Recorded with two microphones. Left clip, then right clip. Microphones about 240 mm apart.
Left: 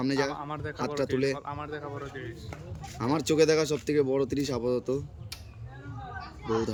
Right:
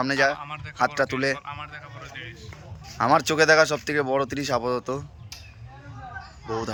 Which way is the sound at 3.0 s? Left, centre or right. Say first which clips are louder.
Right 6 dB; centre.